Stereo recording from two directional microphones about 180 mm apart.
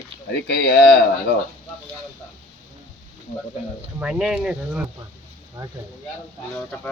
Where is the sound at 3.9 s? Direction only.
5° right (ahead or behind).